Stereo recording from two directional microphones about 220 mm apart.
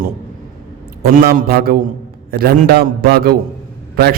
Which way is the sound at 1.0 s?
45° right (ahead or behind).